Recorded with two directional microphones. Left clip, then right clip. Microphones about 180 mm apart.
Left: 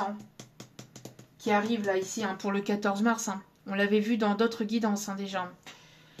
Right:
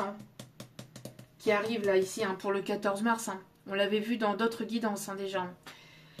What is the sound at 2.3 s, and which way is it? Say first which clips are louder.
Speech: left 1 dB; 35° left (ahead or behind).